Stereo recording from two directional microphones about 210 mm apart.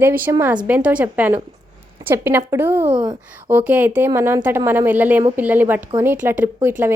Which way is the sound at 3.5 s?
10° right (ahead or behind).